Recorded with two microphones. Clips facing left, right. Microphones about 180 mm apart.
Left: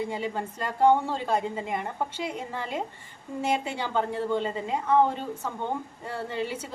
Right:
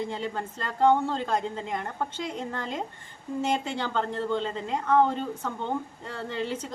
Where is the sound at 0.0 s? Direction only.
10° left (ahead or behind).